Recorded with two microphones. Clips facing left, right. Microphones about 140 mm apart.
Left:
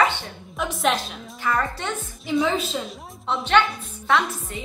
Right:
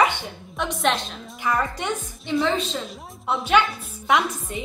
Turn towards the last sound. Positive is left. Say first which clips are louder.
# right 1 dB
turn(degrees=-20)  # may be behind; listen again after turning